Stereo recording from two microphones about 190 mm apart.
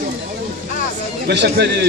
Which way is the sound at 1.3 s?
65° right (ahead or behind).